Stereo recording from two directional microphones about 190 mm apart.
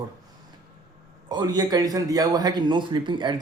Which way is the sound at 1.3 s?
20° right (ahead or behind).